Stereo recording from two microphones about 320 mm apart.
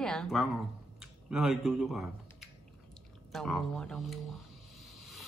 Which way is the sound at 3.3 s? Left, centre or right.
Centre.